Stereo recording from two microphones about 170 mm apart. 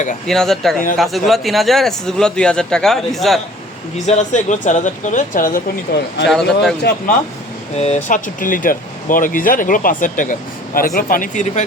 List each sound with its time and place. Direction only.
0.3 s speech: centre (ahead or behind)
3.9 s speech: 45° left (ahead or behind)
6.2 s speech: centre (ahead or behind)
7.8 s speech: 40° left (ahead or behind)